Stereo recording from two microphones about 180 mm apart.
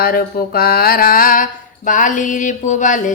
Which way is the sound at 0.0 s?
55° left (ahead or behind).